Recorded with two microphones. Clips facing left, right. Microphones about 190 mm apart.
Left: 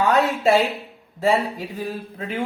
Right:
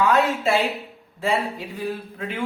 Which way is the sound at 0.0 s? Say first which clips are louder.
Left 1 dB; 40° left (ahead or behind).